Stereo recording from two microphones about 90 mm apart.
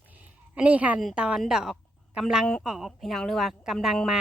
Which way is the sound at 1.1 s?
10° right (ahead or behind).